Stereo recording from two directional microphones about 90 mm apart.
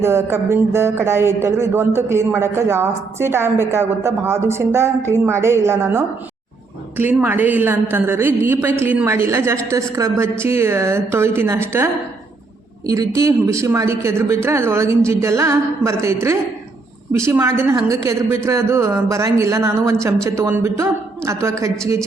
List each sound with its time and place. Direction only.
0.0 s a man's voice: 30° right (ahead or behind)
12.8 s a man's voice: 40° right (ahead or behind)